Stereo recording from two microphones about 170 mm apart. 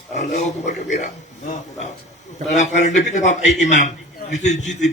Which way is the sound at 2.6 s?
45° left (ahead or behind).